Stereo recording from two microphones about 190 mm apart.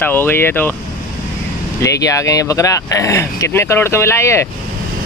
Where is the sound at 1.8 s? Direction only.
15° left (ahead or behind).